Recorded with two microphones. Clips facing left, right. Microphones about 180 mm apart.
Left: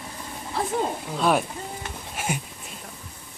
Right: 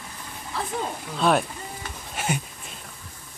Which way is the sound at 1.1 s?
10° left (ahead or behind).